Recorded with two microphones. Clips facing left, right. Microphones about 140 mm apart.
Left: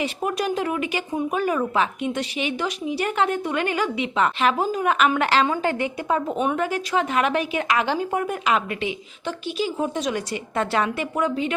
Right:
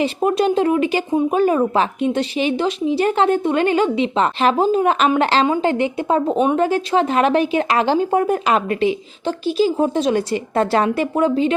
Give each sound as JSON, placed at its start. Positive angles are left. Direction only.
{"t": 0.0, "sound": "speech", "side_deg": -30}